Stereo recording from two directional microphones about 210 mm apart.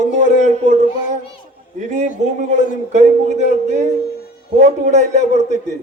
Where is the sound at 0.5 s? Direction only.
30° right (ahead or behind).